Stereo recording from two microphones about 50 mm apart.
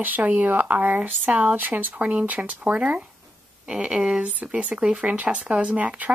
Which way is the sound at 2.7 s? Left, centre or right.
Right.